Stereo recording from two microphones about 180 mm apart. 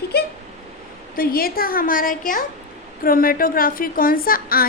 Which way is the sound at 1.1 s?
55° left (ahead or behind).